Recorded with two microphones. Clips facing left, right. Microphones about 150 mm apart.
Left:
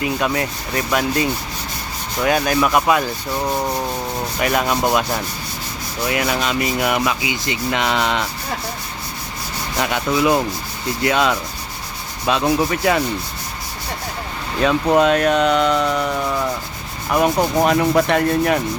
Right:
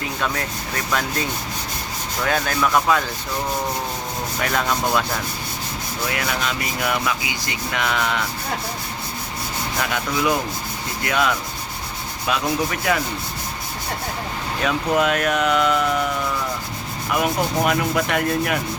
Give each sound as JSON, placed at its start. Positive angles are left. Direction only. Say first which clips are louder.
{"t": 0.0, "sound": "speech", "louder": "left 5 dB", "side_deg": 10}
{"t": 4.4, "sound": "speech", "louder": "left 4 dB", "side_deg": 15}
{"t": 6.1, "sound": "rub", "louder": "left 5 dB", "side_deg": 20}
{"t": 9.7, "sound": "rub", "louder": "left 5 dB", "side_deg": 25}
{"t": 14.6, "sound": "rub", "louder": "left 5 dB", "side_deg": 30}
{"t": 17.2, "sound": "rub", "louder": "left 5 dB", "side_deg": 35}